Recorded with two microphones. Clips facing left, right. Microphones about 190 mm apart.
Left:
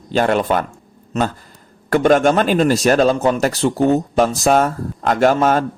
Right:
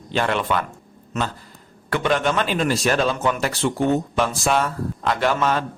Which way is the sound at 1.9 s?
45° left (ahead or behind).